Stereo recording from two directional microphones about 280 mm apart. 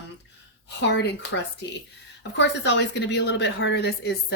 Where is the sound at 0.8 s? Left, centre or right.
Left.